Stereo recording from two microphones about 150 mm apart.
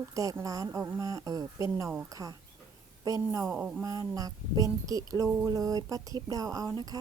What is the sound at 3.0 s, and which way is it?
Speech, 25° right (ahead or behind).